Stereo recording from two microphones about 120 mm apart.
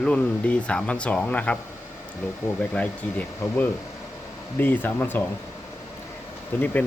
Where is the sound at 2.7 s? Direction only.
10° left (ahead or behind).